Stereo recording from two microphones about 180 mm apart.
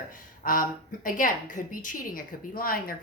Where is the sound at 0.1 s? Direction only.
50° left (ahead or behind).